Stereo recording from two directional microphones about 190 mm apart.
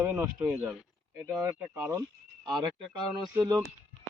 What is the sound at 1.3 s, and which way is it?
Speech, 15° right (ahead or behind).